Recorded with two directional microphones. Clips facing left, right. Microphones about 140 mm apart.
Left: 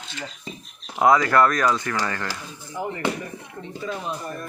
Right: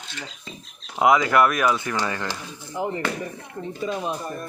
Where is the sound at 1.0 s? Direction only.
15° right (ahead or behind).